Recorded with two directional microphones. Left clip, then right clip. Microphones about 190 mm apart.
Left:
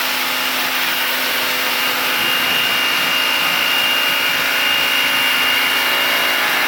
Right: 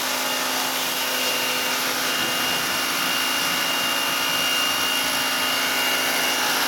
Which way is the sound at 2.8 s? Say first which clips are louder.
Left 7 dB; 50° right (ahead or behind).